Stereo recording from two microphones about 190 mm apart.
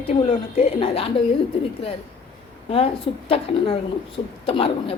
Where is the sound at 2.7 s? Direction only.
30° left (ahead or behind).